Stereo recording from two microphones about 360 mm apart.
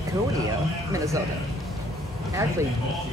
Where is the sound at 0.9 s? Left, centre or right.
Centre.